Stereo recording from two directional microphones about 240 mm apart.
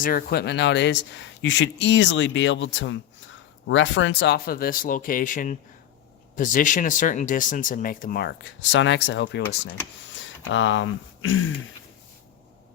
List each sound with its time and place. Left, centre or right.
0.0 s speech: left